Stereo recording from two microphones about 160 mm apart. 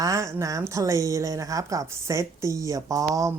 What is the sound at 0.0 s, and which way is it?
Speech, 20° right (ahead or behind).